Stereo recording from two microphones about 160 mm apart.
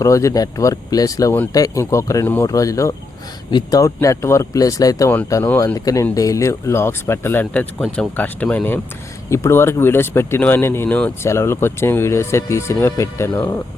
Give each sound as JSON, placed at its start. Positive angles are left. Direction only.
{"t": 0.0, "sound": "speech", "side_deg": 20}